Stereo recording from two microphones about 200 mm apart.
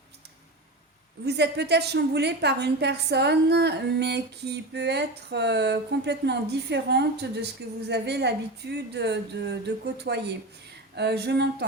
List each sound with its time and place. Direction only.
1.2 s a woman's voice: 55° right (ahead or behind)